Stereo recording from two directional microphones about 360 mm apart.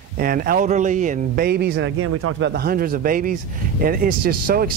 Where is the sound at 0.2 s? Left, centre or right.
Right.